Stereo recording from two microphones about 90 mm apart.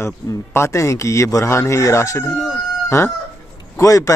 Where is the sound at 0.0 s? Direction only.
30° left (ahead or behind).